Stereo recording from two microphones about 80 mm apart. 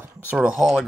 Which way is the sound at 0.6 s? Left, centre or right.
Centre.